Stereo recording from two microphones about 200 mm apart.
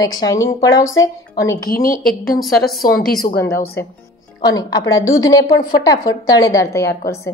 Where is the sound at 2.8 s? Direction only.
45° left (ahead or behind).